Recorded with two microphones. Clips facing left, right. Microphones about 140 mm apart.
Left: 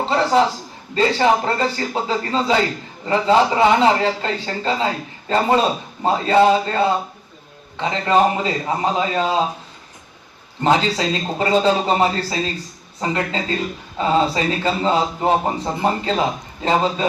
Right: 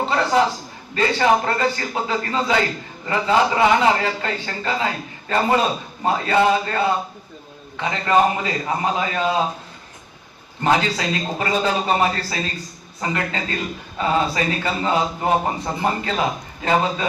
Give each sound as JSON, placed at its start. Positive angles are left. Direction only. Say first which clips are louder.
{"t": 0.0, "sound": "a man's voice", "louder": "left 2 dB", "side_deg": 25}
{"t": 10.6, "sound": "speech", "louder": "left 2 dB", "side_deg": 25}